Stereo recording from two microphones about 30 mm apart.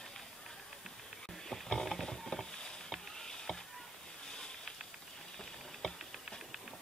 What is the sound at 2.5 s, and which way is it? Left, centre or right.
Stir, left.